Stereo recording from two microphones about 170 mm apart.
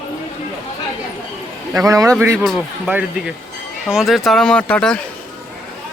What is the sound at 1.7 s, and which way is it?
Speech, 20° right (ahead or behind).